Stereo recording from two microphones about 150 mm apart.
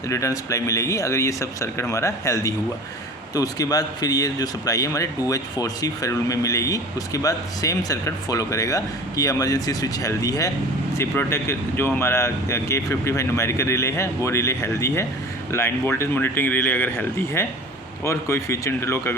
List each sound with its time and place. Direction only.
0.1 s speech: 20° left (ahead or behind)